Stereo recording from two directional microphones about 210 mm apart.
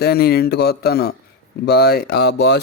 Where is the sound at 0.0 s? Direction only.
50° left (ahead or behind).